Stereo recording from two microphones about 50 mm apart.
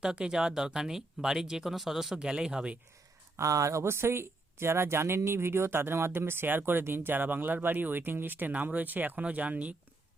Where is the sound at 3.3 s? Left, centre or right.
Right.